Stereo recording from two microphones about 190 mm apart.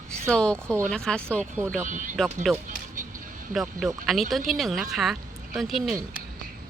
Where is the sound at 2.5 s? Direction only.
Centre (ahead or behind).